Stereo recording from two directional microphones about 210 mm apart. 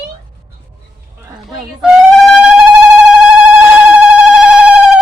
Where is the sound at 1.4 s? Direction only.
Centre (ahead or behind).